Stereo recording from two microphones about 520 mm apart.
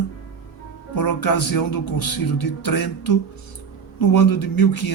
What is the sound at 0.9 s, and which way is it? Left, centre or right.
Speech, left.